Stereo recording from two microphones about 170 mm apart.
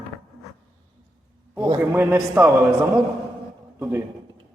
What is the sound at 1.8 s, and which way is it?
A man's voice, 10° right (ahead or behind).